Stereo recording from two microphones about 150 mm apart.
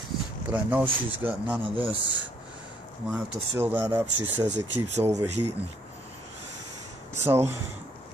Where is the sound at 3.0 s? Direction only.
5° right (ahead or behind).